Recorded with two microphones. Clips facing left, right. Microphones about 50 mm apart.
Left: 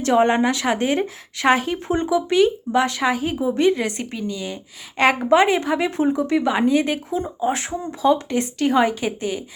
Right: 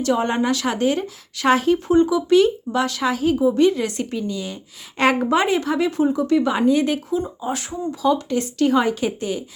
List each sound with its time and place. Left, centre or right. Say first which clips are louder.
0.0 s speech: left 3 dB; left
1.5 s speech: right 6 dB; centre
2.7 s speech: left 4 dB; left
3.1 s speech: right 3 dB; centre
5.5 s speech: right 1 dB; centre
7.4 s speech: left 2 dB; left; by 9.4 s centre